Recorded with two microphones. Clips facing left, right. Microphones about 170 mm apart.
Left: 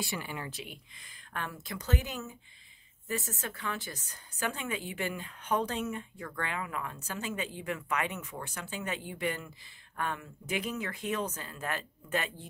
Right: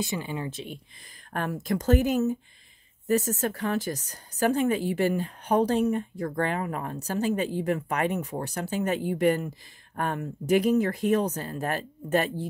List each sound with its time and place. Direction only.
0.0 s speech: 20° right (ahead or behind)
1.3 s speech: 45° right (ahead or behind)